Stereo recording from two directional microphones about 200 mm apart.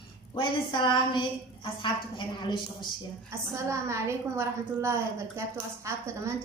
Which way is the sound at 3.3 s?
15° right (ahead or behind).